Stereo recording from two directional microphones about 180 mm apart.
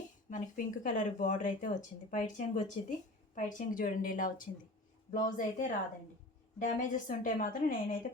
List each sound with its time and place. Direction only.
0.3 s speech: 45° left (ahead or behind)